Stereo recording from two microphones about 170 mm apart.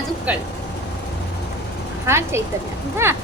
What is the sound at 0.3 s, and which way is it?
Speech, 10° right (ahead or behind).